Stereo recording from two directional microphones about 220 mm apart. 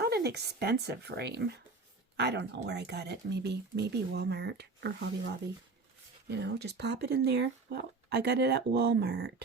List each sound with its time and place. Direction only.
0.0 s speech: 50° right (ahead or behind)
6.2 s speech: 50° right (ahead or behind)